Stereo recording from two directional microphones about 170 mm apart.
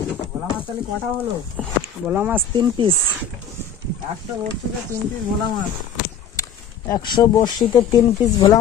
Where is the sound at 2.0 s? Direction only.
10° right (ahead or behind).